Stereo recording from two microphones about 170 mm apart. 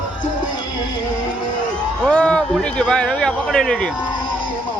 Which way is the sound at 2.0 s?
5° left (ahead or behind).